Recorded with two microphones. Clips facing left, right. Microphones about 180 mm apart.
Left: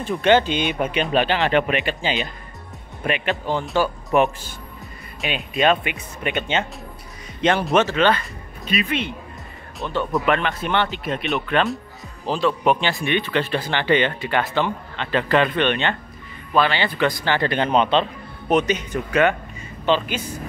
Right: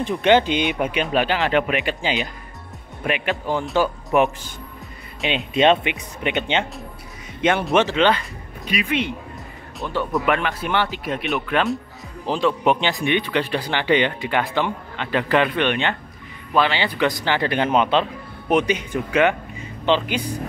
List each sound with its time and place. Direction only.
0.0 s speech: 15° right (ahead or behind)
7.4 s speech: centre (ahead or behind)
7.7 s speech: 15° right (ahead or behind)
10.2 s speech: 10° right (ahead or behind)
12.3 s speech: 15° right (ahead or behind)